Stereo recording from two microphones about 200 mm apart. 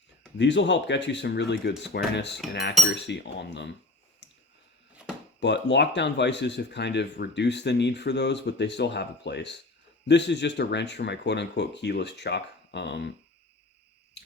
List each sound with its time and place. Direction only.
0.3 s speech: 65° left (ahead or behind)
5.4 s speech: 60° left (ahead or behind)